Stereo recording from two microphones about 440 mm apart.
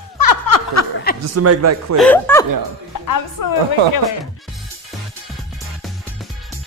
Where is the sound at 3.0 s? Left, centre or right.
Left.